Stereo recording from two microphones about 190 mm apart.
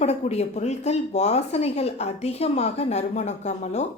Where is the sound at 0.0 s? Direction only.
35° left (ahead or behind).